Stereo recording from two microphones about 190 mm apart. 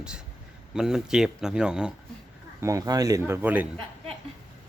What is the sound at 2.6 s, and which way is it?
A man's voice, 15° right (ahead or behind).